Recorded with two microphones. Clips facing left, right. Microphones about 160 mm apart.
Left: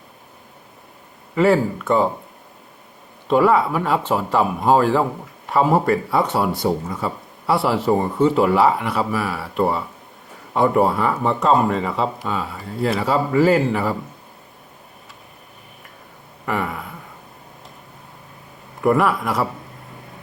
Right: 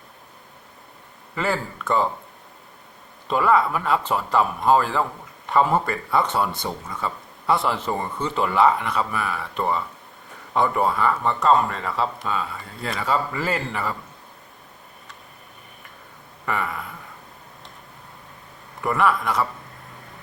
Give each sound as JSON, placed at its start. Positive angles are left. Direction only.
{"t": 1.8, "sound": "speech", "side_deg": 5}
{"t": 3.2, "sound": "speech", "side_deg": 5}
{"t": 6.7, "sound": "speech", "side_deg": 25}
{"t": 7.0, "sound": "speech", "side_deg": 5}
{"t": 16.5, "sound": "a sound", "side_deg": 5}
{"t": 18.8, "sound": "speech", "side_deg": 0}